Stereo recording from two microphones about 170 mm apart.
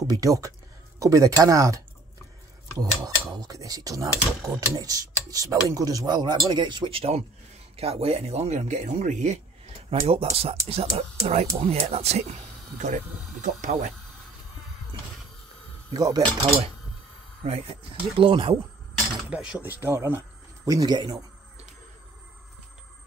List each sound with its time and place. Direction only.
0.0 s speech: 20° right (ahead or behind)
2.8 s speech: 20° right (ahead or behind); by 13.9 s 45° right (ahead or behind)
15.9 s speech: 25° right (ahead or behind)
18.1 s speech: 30° right (ahead or behind)
19.2 s speech: 10° right (ahead or behind); by 21.2 s 25° right (ahead or behind)